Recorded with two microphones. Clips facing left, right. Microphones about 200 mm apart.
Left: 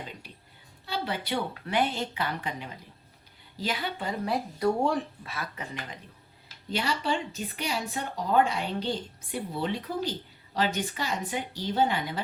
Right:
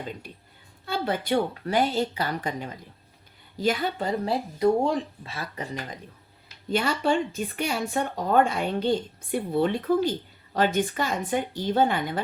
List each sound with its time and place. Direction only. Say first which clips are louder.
0.9 s speech: right 6 dB; 50° right (ahead or behind)
4.3 s speech: right 4 dB; 20° right (ahead or behind); by 6.0 s 35° right (ahead or behind)
6.7 s speech: right 5 dB; 50° right (ahead or behind)